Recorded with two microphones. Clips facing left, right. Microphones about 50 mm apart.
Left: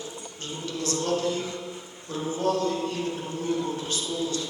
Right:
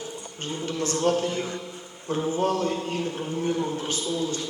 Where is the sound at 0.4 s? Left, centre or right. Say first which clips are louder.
Right 3 dB; right.